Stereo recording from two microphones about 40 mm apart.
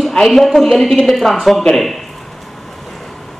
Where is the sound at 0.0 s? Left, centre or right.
Centre.